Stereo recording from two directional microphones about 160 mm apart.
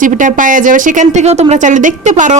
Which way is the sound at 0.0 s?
55° right (ahead or behind).